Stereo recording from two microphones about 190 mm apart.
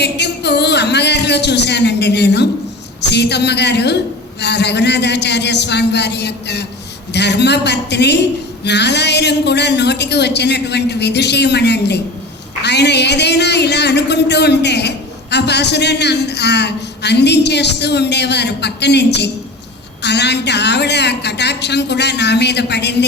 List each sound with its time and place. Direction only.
0.0 s speech: 65° left (ahead or behind)